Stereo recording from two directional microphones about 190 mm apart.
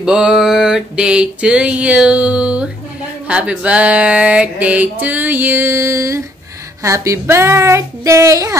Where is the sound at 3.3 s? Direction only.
5° right (ahead or behind).